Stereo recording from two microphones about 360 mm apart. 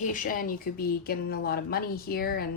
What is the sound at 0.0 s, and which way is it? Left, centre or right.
Speech, left.